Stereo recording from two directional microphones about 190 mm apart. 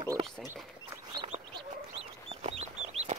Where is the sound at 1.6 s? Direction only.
30° right (ahead or behind).